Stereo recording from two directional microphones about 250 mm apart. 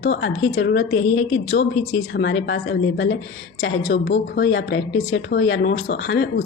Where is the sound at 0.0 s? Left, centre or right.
Left.